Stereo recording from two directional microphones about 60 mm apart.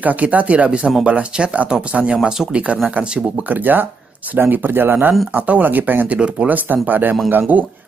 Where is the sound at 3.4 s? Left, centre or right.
Right.